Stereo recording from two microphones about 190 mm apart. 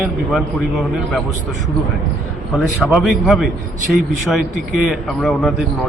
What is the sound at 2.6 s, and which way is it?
A man's voice, centre (ahead or behind).